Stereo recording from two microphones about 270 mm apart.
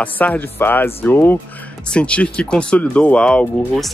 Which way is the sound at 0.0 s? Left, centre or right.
Centre.